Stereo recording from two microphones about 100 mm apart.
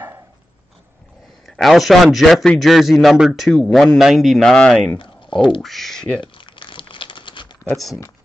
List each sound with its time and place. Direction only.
1.4 s a man's voice: centre (ahead or behind)
6.2 s crumpling: 55° left (ahead or behind)
7.7 s a man's voice: centre (ahead or behind)